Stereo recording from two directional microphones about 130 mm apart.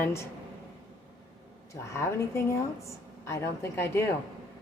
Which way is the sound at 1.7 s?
20° left (ahead or behind).